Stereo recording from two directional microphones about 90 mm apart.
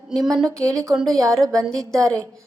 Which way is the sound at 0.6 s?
35° right (ahead or behind).